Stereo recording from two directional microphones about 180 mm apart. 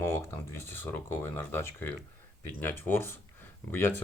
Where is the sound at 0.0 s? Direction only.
15° left (ahead or behind).